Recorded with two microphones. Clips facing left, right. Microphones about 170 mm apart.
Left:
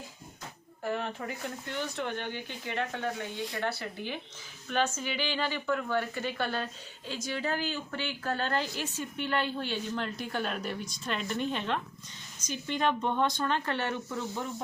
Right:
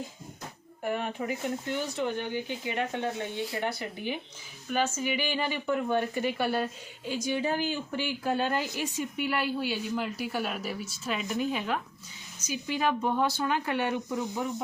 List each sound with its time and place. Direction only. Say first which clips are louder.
0.9 s speech: right 3 dB; 15° right (ahead or behind)